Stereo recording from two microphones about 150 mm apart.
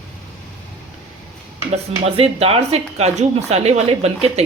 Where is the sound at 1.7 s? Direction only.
40° right (ahead or behind).